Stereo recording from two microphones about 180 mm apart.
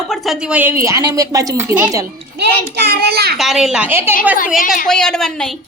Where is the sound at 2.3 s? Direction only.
65° right (ahead or behind).